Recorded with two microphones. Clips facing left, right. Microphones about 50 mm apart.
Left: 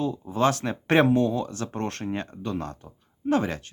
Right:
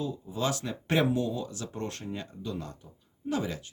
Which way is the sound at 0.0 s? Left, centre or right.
Left.